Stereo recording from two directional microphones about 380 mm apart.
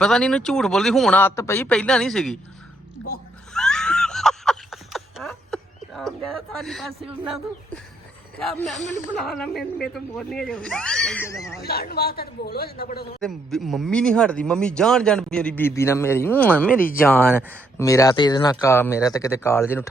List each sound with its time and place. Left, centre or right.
0.0 s speech: centre
3.5 s a sound: centre
7.3 s speech: centre
11.6 s a man's voice: left
13.2 s speech: centre